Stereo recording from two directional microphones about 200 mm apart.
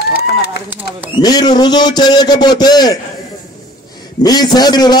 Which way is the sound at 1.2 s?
20° left (ahead or behind).